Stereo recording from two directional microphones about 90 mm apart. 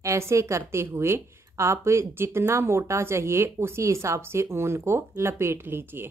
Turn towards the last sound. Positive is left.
turn(degrees=-25)  # may be behind; listen again after turning